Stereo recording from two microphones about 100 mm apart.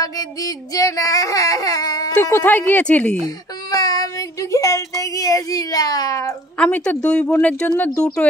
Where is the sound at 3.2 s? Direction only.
40° left (ahead or behind).